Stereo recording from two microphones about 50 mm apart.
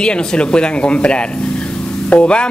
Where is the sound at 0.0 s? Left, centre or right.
Centre.